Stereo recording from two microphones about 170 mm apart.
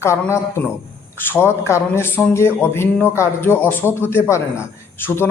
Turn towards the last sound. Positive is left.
turn(degrees=15)  # may be behind; listen again after turning